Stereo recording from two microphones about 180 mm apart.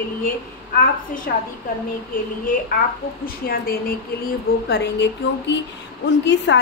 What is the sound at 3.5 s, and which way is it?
Speech, 55° left (ahead or behind).